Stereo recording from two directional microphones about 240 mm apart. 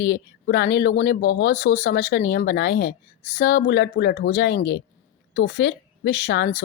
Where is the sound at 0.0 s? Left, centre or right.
Left.